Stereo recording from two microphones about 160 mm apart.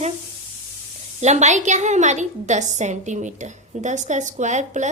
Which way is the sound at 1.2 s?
45° right (ahead or behind).